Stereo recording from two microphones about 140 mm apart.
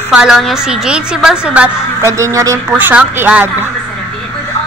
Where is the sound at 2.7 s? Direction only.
10° right (ahead or behind).